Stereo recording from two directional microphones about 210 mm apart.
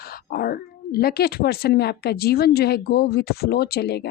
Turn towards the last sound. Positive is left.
turn(degrees=50)  # may be behind; listen again after turning